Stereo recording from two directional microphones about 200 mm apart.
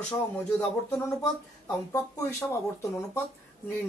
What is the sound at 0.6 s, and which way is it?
Speech, 15° left (ahead or behind).